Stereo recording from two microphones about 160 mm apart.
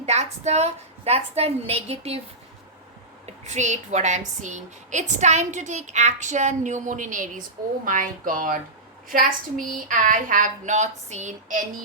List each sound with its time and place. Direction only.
0.0 s a woman's voice: 45° right (ahead or behind)
3.2 s a woman's voice: 45° right (ahead or behind)